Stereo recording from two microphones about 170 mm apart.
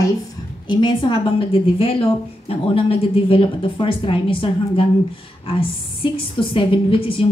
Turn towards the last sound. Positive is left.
turn(degrees=30)  # may be behind; listen again after turning